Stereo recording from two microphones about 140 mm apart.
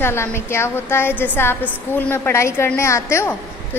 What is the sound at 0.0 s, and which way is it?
A woman's voice, 15° left (ahead or behind).